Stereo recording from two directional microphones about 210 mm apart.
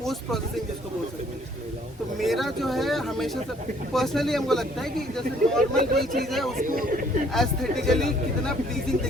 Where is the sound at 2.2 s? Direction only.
Centre (ahead or behind).